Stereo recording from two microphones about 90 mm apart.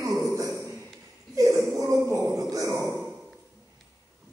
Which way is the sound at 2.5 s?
40° right (ahead or behind).